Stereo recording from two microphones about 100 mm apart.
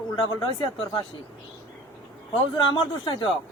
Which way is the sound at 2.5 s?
50° left (ahead or behind).